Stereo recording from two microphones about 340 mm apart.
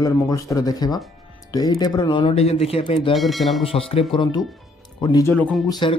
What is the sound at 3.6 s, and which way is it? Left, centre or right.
Speech, centre.